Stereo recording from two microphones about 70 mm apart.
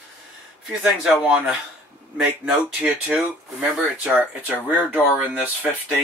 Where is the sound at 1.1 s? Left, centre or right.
Centre.